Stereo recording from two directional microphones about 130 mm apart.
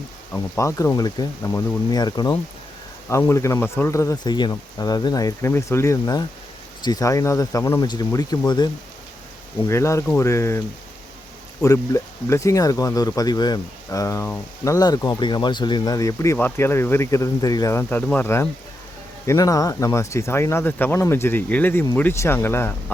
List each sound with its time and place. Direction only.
0.3 s speech: 25° left (ahead or behind)
3.1 s speech: 20° left (ahead or behind)
9.6 s speech: 20° left (ahead or behind)
11.6 s speech: 25° left (ahead or behind)